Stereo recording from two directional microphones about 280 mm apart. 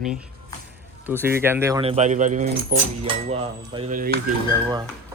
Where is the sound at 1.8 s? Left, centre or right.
Right.